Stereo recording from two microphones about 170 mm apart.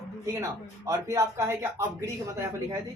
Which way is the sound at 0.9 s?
15° right (ahead or behind).